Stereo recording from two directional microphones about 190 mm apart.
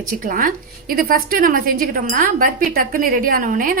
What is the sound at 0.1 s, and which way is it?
A woman's voice, 45° right (ahead or behind).